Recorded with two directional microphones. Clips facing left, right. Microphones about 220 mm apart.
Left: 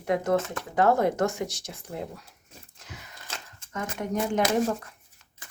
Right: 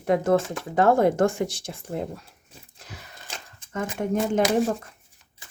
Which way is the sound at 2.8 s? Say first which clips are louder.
Right 2 dB; 35° right (ahead or behind).